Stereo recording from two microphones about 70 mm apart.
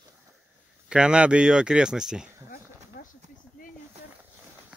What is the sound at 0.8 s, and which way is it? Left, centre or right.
Speech, centre.